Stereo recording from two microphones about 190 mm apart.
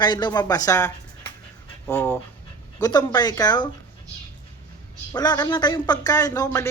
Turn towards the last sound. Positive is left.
turn(degrees=20)  # may be behind; listen again after turning